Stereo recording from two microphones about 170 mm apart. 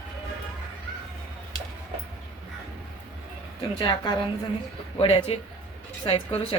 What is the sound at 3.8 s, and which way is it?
A woman's voice, 25° left (ahead or behind).